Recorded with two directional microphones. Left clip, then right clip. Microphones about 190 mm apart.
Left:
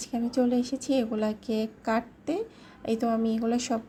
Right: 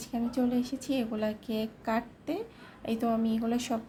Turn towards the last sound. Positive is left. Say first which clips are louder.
# left 3 dB
turn(degrees=20)  # may be behind; listen again after turning